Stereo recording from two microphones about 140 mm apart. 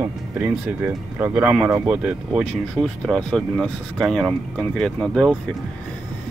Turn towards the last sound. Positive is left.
turn(degrees=0)  # may be behind; listen again after turning